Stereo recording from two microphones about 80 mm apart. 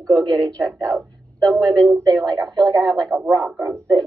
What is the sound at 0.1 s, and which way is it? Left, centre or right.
Speech, right.